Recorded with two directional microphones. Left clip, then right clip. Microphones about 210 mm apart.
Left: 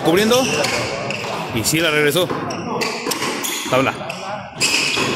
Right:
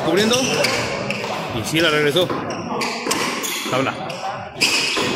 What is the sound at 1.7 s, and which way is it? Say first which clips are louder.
Speech: even; 25° left (ahead or behind).